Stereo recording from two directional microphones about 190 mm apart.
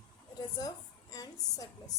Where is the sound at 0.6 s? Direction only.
20° left (ahead or behind).